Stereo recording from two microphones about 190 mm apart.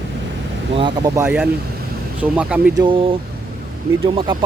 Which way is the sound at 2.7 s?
25° right (ahead or behind).